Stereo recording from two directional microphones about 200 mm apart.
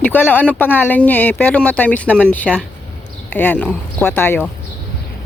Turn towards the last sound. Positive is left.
turn(degrees=10)  # may be behind; listen again after turning